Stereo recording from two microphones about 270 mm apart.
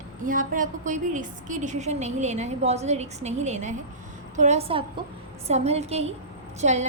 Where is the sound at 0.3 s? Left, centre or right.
Right.